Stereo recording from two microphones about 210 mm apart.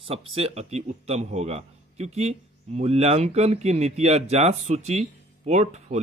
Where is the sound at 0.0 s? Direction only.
25° right (ahead or behind).